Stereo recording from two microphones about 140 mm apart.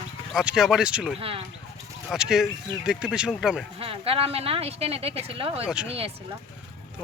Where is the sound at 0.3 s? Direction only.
5° right (ahead or behind).